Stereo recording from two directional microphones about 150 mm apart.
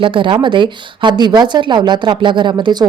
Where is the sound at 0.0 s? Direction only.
35° right (ahead or behind).